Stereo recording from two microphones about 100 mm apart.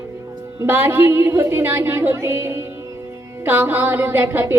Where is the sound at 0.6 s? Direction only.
20° right (ahead or behind).